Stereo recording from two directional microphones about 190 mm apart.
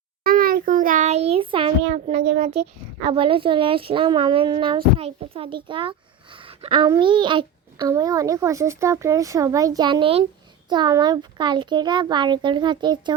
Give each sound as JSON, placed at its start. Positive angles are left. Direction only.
{"t": 0.3, "sound": "a child's voice", "side_deg": -50}